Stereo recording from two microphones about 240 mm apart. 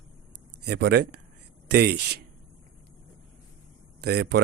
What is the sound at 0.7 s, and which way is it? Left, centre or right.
A man's voice, right.